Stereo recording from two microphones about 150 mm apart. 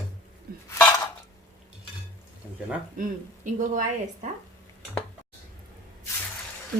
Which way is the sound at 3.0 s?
60° right (ahead or behind).